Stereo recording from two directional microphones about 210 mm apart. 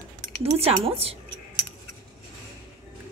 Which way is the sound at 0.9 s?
30° right (ahead or behind).